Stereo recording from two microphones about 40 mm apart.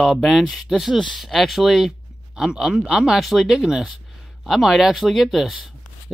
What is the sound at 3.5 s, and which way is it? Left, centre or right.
Speech, centre.